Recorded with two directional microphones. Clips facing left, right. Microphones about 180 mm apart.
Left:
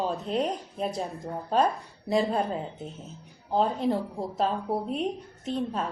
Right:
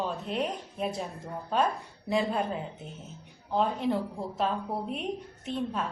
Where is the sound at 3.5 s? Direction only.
35° left (ahead or behind).